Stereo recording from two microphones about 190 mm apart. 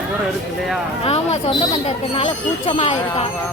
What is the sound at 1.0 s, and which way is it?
Speech, 35° left (ahead or behind).